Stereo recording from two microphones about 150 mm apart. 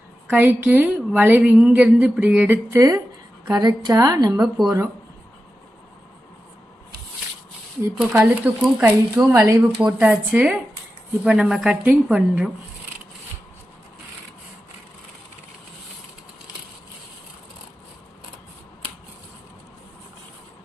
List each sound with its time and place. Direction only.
0.3 s a woman's voice: 10° right (ahead or behind)
4.4 s speech: centre (ahead or behind)
7.9 s a woman's voice: 10° right (ahead or behind)